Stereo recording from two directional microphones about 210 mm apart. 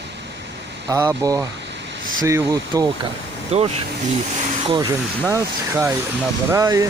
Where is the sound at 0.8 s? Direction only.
15° right (ahead or behind).